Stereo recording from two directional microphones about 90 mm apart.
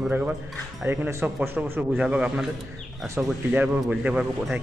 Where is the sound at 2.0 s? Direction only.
10° right (ahead or behind).